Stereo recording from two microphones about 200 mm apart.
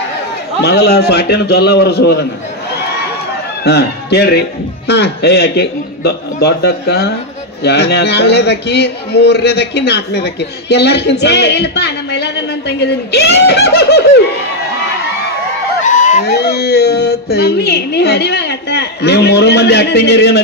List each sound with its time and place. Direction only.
0.6 s a man's voice: 55° left (ahead or behind)
3.6 s a man's voice: 55° left (ahead or behind)
15.8 s fowl: 40° left (ahead or behind)
16.3 s a man's voice: 55° left (ahead or behind)